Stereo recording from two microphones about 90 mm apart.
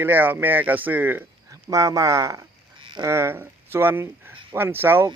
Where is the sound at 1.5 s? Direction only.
40° right (ahead or behind).